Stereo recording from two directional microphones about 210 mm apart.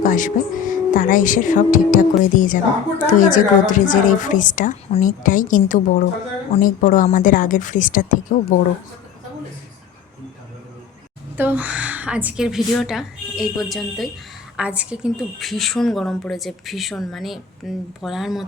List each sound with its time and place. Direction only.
0.0 s a woman's voice: 40° left (ahead or behind)
11.3 s a woman's voice: 10° right (ahead or behind)